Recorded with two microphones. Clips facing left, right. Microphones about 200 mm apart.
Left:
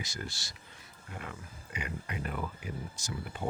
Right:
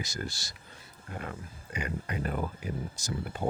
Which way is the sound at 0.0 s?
40° right (ahead or behind).